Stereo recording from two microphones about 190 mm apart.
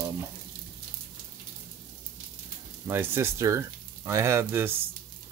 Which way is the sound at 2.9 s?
10° right (ahead or behind).